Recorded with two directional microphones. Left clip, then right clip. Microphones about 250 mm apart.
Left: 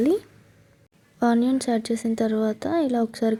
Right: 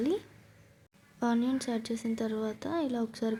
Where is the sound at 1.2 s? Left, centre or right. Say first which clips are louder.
Left 9 dB; centre.